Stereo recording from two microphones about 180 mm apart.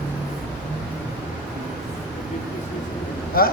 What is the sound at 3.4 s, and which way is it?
Speech, 55° left (ahead or behind).